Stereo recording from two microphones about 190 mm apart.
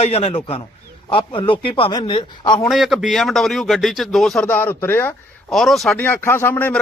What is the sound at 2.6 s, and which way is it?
A man's voice, centre (ahead or behind).